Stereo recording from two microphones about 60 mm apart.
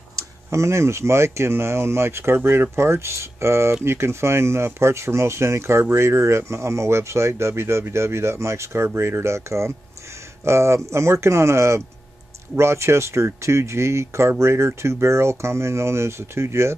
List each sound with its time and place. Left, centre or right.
0.5 s speech: right